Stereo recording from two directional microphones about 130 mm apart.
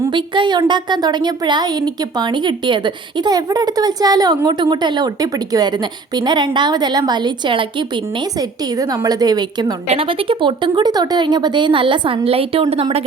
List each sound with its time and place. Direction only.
0.1 s a woman's voice: 40° right (ahead or behind)
8.4 s a woman's voice: 30° right (ahead or behind)
9.9 s a woman's voice: 45° right (ahead or behind)